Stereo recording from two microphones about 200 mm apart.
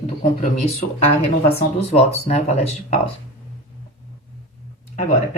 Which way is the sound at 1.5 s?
30° left (ahead or behind).